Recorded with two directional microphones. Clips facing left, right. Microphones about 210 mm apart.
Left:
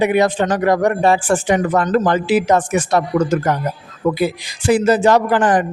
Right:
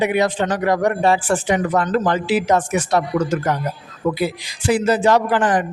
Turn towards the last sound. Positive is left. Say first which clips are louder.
# left 3 dB
turn(degrees=45)  # may be behind; listen again after turning